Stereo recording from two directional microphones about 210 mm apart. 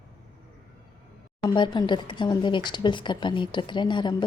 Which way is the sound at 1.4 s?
20° left (ahead or behind).